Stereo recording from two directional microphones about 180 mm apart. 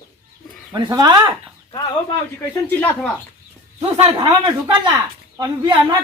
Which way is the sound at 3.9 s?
35° right (ahead or behind).